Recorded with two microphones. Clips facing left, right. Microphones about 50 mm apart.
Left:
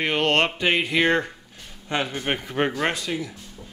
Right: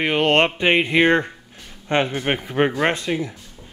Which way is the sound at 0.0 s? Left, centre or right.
Centre.